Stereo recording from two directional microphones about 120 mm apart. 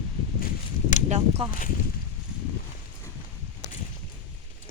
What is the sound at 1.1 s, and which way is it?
Speech, 60° right (ahead or behind).